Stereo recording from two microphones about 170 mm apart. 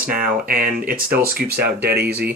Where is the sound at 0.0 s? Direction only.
55° right (ahead or behind).